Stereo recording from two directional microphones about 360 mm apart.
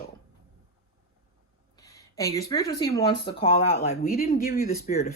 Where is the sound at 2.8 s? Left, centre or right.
Centre.